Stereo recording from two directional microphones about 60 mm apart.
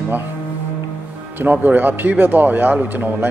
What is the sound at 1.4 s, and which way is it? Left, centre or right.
A man's voice, right.